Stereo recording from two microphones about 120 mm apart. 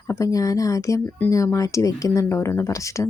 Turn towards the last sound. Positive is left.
turn(degrees=25)  # may be behind; listen again after turning